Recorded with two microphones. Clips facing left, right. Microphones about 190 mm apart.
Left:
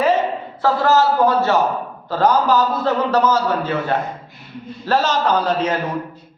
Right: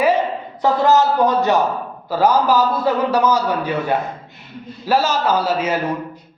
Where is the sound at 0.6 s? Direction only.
20° right (ahead or behind).